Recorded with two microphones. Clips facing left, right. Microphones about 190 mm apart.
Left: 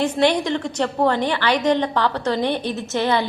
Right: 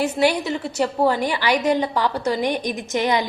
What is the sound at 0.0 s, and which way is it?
A woman's voice, 10° right (ahead or behind).